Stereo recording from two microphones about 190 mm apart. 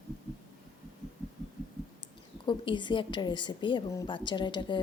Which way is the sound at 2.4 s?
25° left (ahead or behind).